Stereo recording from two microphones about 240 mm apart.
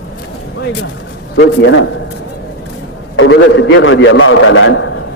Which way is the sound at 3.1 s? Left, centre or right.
Left.